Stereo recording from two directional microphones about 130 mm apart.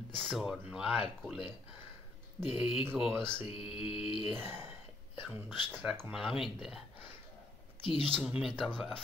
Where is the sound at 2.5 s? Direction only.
45° left (ahead or behind).